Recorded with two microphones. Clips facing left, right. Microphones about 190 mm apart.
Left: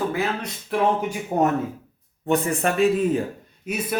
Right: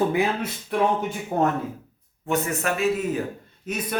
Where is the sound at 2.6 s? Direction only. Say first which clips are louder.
Left 4 dB; 30° left (ahead or behind).